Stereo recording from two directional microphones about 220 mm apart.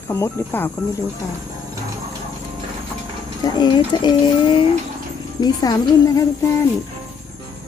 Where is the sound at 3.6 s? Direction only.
20° left (ahead or behind).